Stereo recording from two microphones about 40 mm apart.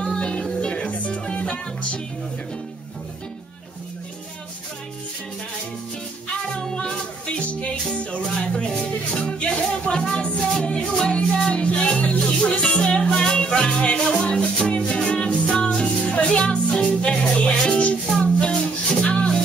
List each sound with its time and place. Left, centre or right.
0.0 s music: left
0.7 s music: left
6.6 s music: centre
7.3 s music: left
8.4 s music: left